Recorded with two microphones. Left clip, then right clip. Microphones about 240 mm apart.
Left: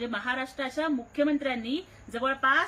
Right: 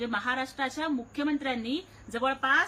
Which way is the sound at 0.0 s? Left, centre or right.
Centre.